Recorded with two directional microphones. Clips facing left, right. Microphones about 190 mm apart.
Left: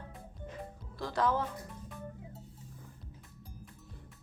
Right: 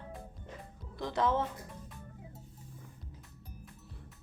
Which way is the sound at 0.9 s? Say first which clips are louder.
Right 1 dB; 20° right (ahead or behind).